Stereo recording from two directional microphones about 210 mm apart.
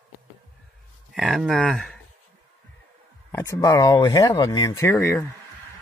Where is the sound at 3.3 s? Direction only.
15° left (ahead or behind).